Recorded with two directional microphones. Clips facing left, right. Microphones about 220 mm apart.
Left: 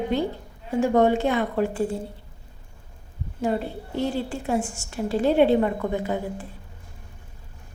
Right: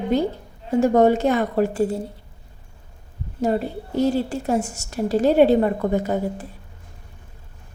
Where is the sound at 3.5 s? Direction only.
40° right (ahead or behind).